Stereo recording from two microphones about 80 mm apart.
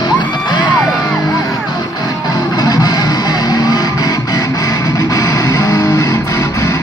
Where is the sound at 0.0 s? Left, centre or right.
Left.